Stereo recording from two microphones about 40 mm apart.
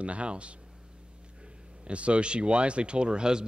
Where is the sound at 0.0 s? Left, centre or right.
Right.